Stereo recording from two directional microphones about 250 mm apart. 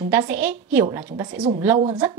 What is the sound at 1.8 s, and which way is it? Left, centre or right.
Speech, right.